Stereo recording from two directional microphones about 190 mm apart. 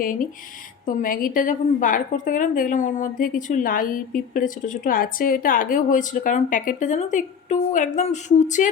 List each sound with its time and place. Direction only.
0.9 s a woman's voice: 45° left (ahead or behind)